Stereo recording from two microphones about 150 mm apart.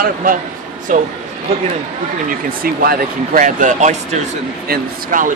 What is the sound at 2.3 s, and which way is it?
Speech, 85° right.